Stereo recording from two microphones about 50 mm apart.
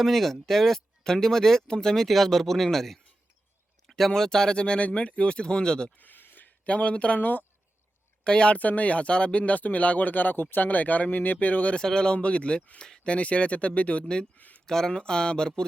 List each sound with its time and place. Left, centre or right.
0.0 s speech: centre
6.0 s a sound: left
6.7 s speech: left
8.2 s speech: centre
11.8 s speech: centre
12.8 s speech: centre
13.1 s speech: left
14.0 s speech: centre
14.3 s speech: left
14.7 s speech: centre